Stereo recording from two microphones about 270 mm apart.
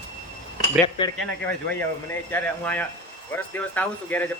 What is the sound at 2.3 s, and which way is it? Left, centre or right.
Speech, centre.